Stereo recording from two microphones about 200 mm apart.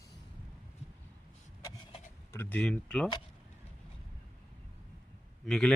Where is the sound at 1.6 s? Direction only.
20° left (ahead or behind).